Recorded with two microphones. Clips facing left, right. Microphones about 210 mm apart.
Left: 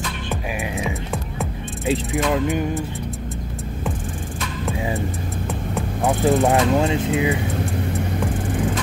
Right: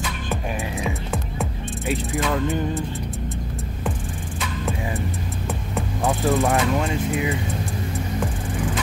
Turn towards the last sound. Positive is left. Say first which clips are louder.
# left 4 dB
turn(degrees=25)  # may be behind; listen again after turning